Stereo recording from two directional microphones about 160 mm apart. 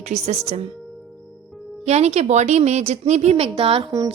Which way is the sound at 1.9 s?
40° right (ahead or behind).